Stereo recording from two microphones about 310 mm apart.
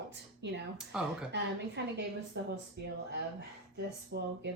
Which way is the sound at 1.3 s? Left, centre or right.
Right.